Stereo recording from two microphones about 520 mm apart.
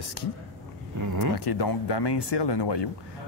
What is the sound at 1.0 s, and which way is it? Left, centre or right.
Speech, right.